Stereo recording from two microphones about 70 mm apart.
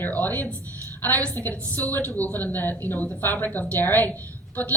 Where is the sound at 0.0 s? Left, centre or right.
Left.